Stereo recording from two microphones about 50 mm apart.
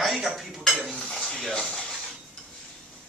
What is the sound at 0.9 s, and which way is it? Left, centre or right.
Dishes, centre.